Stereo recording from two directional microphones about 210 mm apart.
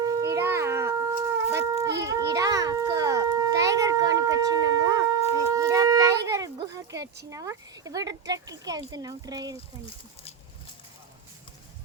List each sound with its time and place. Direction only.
0.0 s a sound: 15° right (ahead or behind)
1.5 s shofar: 15° right (ahead or behind)
2.0 s children playing: 15° right (ahead or behind)
5.3 s shofar: 15° right (ahead or behind)
7.3 s speech: 15° right (ahead or behind)